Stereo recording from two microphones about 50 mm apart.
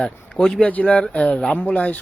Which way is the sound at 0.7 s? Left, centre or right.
Left.